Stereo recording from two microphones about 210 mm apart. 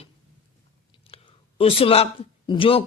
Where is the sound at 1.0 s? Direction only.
25° left (ahead or behind).